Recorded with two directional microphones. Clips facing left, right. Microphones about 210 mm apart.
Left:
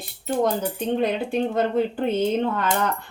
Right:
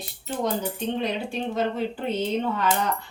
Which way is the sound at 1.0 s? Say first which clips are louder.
Left 5 dB; 55° left (ahead or behind).